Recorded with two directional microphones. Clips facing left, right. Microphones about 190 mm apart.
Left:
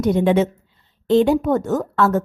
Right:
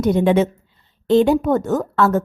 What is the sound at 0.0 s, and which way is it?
A woman's voice, 50° right (ahead or behind).